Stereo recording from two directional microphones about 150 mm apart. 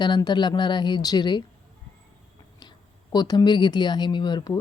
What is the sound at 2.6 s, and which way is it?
A woman's voice, 30° left (ahead or behind).